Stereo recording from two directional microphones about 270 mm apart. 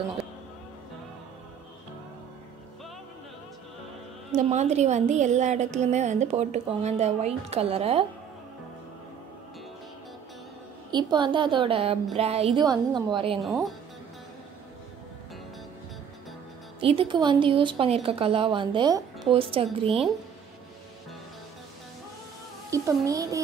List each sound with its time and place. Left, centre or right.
4.4 s a woman's voice: right
10.9 s a woman's voice: centre
13.4 s speech: centre
16.8 s a woman's voice: centre
22.7 s a child's voice: centre